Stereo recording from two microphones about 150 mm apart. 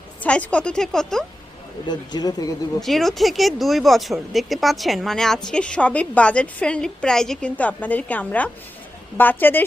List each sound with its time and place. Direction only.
0.2 s a woman's voice: 10° left (ahead or behind)
1.9 s speech: 25° left (ahead or behind)
2.8 s a woman's voice: centre (ahead or behind)